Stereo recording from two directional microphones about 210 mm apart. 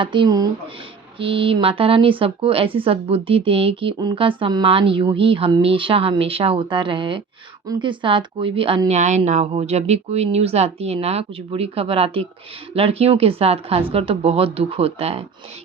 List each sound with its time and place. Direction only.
0.0 s speech: 25° right (ahead or behind)